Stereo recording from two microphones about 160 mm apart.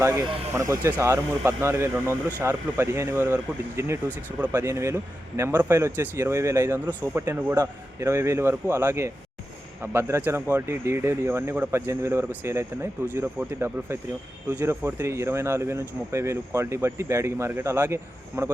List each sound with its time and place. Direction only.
0.2 s speech: 20° right (ahead or behind)